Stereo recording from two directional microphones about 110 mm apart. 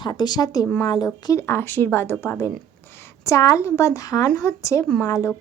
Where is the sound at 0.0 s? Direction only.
40° left (ahead or behind).